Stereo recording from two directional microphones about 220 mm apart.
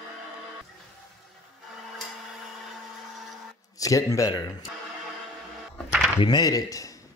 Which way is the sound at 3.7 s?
15° left (ahead or behind).